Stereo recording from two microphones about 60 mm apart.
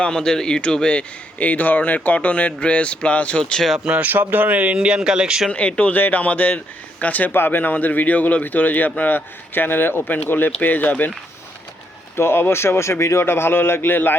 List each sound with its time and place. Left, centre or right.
0.0 s speech: centre
4.0 s speech: right; by 5.5 s centre
5.5 s a man's voice: left
12.1 s speech: left
13.2 s a man's voice: left